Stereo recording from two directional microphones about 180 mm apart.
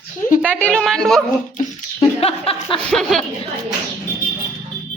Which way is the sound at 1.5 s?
30° left (ahead or behind).